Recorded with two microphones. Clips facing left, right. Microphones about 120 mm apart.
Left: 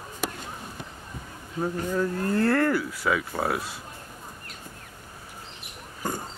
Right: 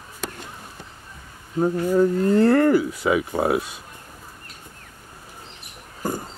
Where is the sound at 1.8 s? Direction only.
20° right (ahead or behind).